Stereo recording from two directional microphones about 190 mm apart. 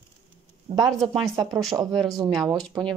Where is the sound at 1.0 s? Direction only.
Centre (ahead or behind).